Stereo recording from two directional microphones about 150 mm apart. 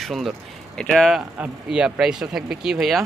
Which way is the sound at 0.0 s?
Centre (ahead or behind).